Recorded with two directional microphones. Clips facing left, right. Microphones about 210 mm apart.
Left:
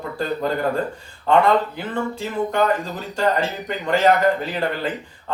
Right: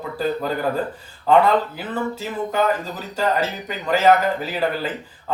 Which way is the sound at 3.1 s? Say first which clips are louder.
Left 1 dB; 5° right (ahead or behind).